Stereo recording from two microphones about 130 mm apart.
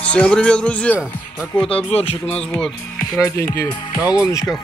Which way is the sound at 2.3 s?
10° left (ahead or behind).